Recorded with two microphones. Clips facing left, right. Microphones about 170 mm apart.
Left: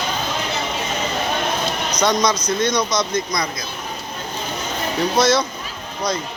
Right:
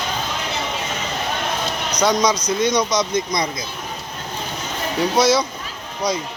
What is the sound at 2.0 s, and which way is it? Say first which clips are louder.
Speech: right 1 dB; 10° right (ahead or behind).